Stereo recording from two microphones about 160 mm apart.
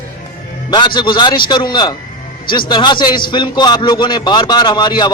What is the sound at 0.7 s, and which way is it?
A man's voice, 30° left (ahead or behind).